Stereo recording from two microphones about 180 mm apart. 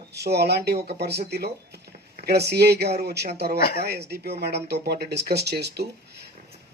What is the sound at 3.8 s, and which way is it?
Speech, 60° right (ahead or behind).